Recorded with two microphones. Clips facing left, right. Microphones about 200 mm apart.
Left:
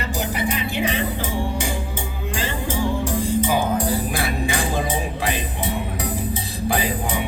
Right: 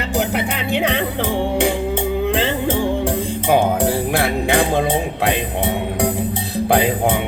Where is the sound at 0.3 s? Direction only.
65° right (ahead or behind).